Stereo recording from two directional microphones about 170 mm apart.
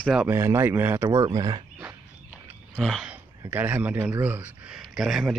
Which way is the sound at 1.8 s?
10° right (ahead or behind).